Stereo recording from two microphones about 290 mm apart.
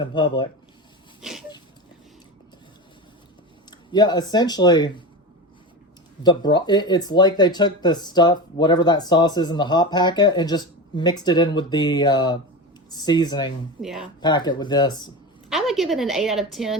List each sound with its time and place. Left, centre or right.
0.0 s speech: centre
1.2 s a sound: centre
3.7 s speech: centre
6.2 s speech: centre
13.8 s a woman's voice: centre
14.2 s speech: centre
15.4 s a woman's voice: centre